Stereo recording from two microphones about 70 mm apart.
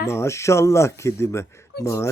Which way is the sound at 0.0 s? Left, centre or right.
Left.